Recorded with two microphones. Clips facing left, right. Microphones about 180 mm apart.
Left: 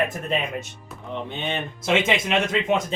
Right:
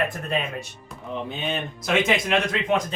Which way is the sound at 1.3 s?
5° right (ahead or behind).